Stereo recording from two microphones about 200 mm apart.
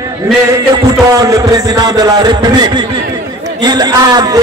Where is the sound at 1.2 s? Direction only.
15° right (ahead or behind).